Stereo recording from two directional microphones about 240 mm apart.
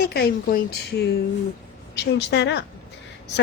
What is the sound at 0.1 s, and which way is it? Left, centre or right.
Speech, left.